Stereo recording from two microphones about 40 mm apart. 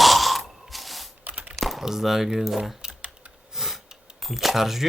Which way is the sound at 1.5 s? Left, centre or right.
Centre.